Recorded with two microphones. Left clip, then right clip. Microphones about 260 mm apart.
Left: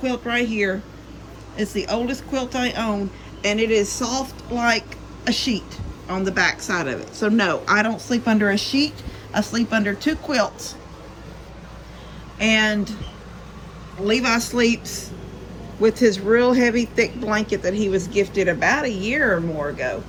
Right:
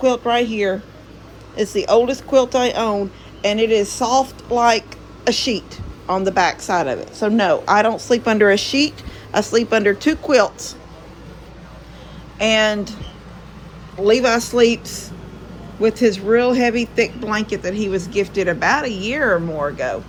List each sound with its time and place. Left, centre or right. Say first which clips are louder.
0.0 s speech: right 7 dB; centre
1.5 s speech: right 9 dB; centre
3.4 s speech: right 3 dB; centre
8.0 s a woman's voice: right 7 dB; right
12.4 s speech: right 3 dB; centre
14.1 s speech: right 5 dB; centre